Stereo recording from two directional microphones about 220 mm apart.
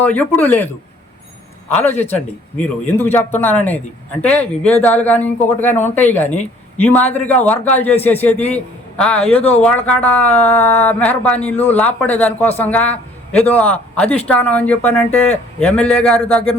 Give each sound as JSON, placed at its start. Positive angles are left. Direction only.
{"t": 0.0, "sound": "speech", "side_deg": 5}
{"t": 1.7, "sound": "speech", "side_deg": 10}
{"t": 6.2, "sound": "speech", "side_deg": 30}
{"t": 6.9, "sound": "a man's voice", "side_deg": 10}